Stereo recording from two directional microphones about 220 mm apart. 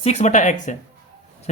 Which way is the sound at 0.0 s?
30° left (ahead or behind).